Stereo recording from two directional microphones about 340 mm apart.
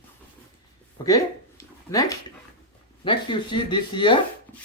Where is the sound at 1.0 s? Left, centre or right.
Centre.